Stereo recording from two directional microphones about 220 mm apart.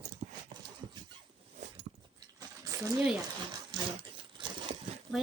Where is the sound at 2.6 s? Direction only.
15° right (ahead or behind).